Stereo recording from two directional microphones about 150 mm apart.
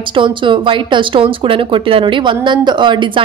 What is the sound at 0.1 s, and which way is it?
Speech, 35° right (ahead or behind).